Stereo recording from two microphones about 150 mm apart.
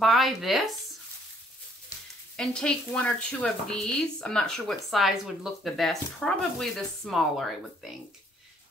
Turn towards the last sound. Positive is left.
turn(degrees=0)  # may be behind; listen again after turning